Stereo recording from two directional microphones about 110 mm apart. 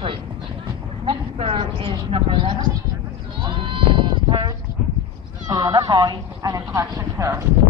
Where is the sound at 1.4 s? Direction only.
55° right (ahead or behind).